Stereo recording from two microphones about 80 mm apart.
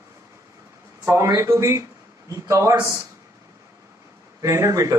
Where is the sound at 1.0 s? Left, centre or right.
Right.